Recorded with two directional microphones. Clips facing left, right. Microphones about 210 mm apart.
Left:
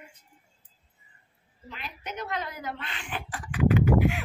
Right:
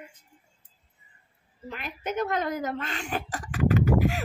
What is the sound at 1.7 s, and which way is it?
Speech, 50° right (ahead or behind).